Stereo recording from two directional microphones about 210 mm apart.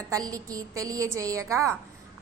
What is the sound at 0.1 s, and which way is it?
A woman's voice, 15° right (ahead or behind).